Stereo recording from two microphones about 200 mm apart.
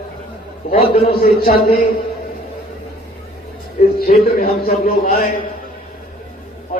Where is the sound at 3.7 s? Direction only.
50° left (ahead or behind).